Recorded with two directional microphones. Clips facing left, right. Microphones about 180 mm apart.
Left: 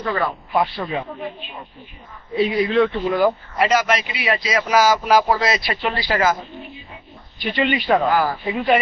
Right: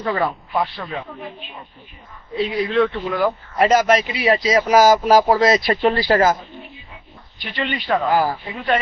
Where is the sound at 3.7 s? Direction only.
45° right (ahead or behind).